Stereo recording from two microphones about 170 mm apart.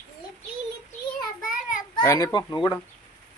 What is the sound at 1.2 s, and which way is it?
Child singing, 55° left (ahead or behind).